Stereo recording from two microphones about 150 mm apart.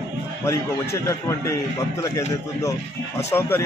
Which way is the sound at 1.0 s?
20° left (ahead or behind).